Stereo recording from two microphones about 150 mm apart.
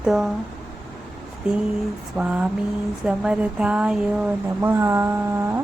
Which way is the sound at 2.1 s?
5° right (ahead or behind).